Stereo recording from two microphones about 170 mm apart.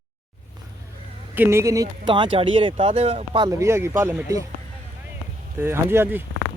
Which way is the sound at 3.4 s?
15° right (ahead or behind).